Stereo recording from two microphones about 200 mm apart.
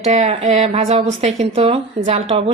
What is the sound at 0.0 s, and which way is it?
A woman's voice, 35° right (ahead or behind).